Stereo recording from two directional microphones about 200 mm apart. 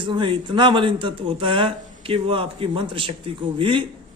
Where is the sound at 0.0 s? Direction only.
25° right (ahead or behind).